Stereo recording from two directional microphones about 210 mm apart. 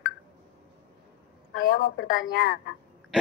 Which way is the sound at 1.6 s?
50° left (ahead or behind).